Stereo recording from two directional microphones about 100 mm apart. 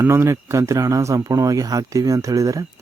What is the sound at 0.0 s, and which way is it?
Speech, 25° right (ahead or behind).